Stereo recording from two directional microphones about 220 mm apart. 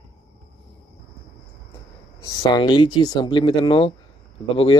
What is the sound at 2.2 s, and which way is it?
Speech, 15° left (ahead or behind).